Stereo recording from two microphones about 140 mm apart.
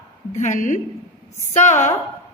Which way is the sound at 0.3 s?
60° left (ahead or behind).